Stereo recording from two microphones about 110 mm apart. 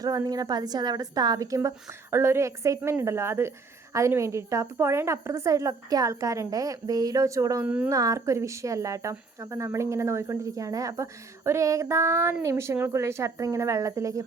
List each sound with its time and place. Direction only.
0.0 s a woman's voice: 35° right (ahead or behind)